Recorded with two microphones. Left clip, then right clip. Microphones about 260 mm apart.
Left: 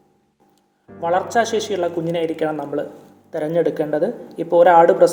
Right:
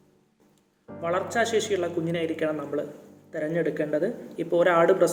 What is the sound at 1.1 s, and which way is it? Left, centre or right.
Speech, centre.